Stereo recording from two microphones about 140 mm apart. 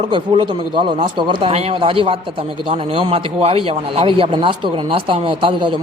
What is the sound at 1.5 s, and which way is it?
Speech, 50° right (ahead or behind).